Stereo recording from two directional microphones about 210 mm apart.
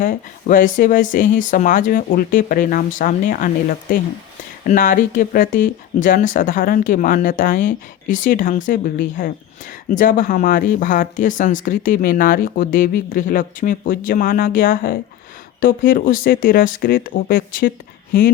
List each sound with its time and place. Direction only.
0.0 s speech: 40° left (ahead or behind)